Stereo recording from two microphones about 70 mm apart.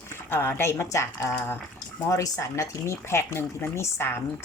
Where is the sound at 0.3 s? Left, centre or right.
Left.